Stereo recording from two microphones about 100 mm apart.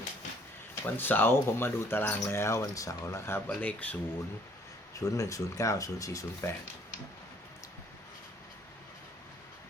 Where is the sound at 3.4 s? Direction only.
15° left (ahead or behind).